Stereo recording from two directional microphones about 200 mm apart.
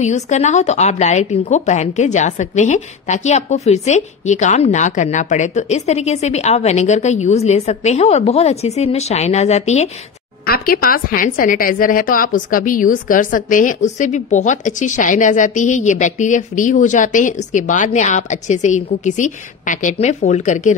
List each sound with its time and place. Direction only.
0.0 s a woman's voice: 35° left (ahead or behind)
10.4 s a woman's voice: 50° left (ahead or behind)